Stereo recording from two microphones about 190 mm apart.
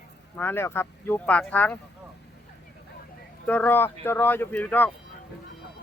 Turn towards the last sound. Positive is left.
turn(degrees=10)  # may be behind; listen again after turning